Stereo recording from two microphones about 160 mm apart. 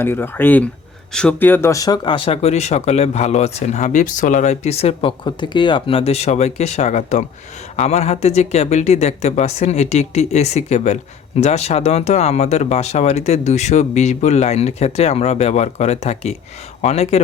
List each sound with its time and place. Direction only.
0.0 s speech: 15° left (ahead or behind); by 17.2 s 40° left (ahead or behind)